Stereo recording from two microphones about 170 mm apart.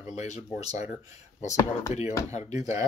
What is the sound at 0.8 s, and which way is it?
Speech, 15° right (ahead or behind).